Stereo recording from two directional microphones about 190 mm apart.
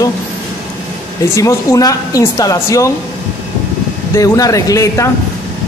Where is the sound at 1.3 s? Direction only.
15° left (ahead or behind).